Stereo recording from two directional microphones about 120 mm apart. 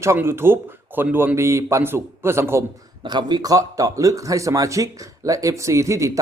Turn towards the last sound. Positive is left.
turn(degrees=-25)  # may be behind; listen again after turning